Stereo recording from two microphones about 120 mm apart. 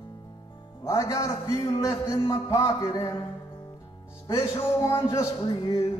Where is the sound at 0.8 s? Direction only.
30° left (ahead or behind).